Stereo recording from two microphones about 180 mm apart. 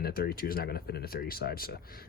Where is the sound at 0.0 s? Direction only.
55° left (ahead or behind).